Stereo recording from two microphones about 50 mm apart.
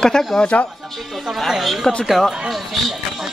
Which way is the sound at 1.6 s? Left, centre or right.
Centre.